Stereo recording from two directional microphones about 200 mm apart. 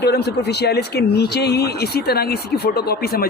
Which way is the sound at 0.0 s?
55° left (ahead or behind).